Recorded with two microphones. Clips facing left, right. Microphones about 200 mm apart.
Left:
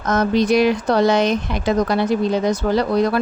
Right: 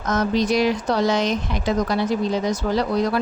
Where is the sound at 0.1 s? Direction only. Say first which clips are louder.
Left 4 dB; 60° left (ahead or behind).